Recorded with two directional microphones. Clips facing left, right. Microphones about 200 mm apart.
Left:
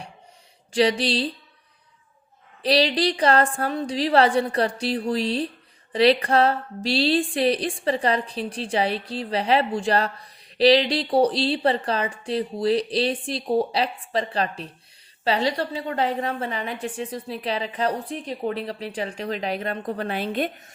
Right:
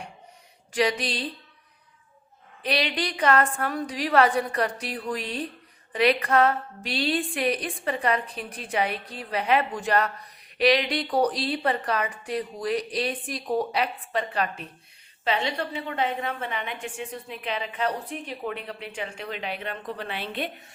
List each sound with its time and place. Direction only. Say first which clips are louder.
0.7 s a woman's voice: left 5 dB; 30° left (ahead or behind)
2.6 s a woman's voice: left 7 dB; 35° left (ahead or behind)